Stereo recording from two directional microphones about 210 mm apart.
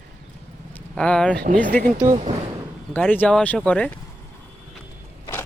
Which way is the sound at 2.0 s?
30° right (ahead or behind).